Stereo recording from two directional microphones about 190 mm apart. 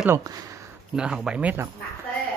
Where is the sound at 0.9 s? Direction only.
5° right (ahead or behind).